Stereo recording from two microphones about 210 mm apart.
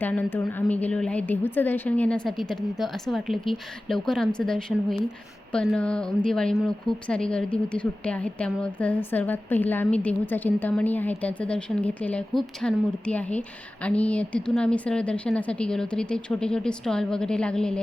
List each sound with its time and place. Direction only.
0.0 s a woman's voice: 10° left (ahead or behind)